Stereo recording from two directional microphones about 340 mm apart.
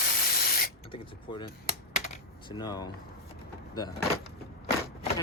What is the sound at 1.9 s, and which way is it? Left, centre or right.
Typing, centre.